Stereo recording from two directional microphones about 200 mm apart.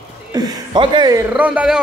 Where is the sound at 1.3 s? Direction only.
5° right (ahead or behind).